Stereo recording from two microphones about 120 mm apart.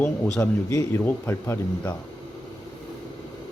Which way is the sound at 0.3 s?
25° left (ahead or behind).